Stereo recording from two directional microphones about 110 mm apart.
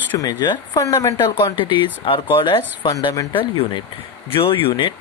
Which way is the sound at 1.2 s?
40° left (ahead or behind).